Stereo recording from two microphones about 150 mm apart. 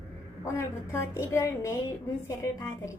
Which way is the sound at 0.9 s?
20° left (ahead or behind).